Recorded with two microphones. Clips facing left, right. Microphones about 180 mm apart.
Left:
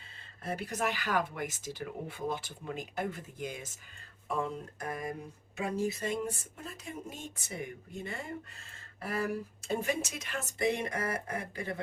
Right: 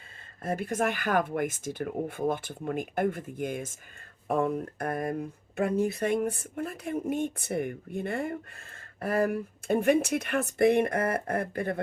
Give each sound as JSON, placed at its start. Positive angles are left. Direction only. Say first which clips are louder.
{"t": 0.4, "sound": "speech", "louder": "right 6 dB", "side_deg": -50}